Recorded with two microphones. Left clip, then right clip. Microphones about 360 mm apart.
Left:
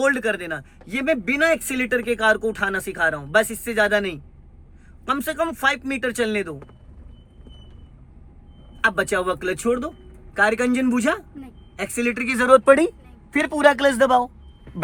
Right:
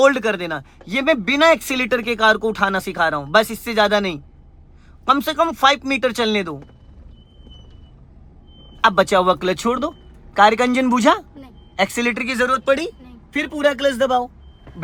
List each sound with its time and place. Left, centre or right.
0.0 s speech: centre
8.8 s speech: centre
13.6 s speech: centre